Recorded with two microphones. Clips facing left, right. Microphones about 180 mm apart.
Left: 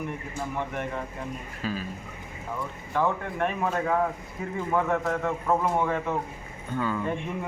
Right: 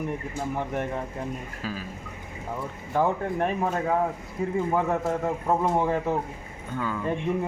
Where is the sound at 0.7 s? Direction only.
40° right (ahead or behind).